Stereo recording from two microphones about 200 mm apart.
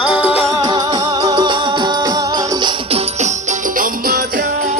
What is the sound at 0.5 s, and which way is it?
Music, 20° right (ahead or behind).